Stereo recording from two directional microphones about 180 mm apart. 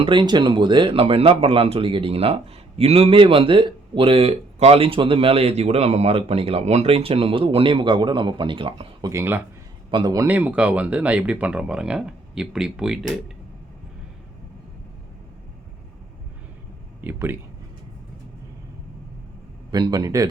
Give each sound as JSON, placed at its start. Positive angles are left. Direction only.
{"t": 0.0, "sound": "speech", "side_deg": -25}
{"t": 10.2, "sound": "speech", "side_deg": -10}
{"t": 17.0, "sound": "speech", "side_deg": -10}
{"t": 19.7, "sound": "speech", "side_deg": -20}